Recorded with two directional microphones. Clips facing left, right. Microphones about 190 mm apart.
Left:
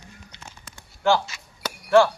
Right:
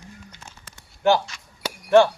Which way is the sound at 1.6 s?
25° right (ahead or behind).